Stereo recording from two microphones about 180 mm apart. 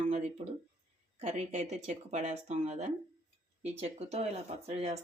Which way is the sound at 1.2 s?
40° right (ahead or behind).